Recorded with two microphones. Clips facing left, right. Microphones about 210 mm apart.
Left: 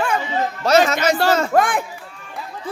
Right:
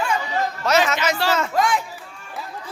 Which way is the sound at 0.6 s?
30° left (ahead or behind).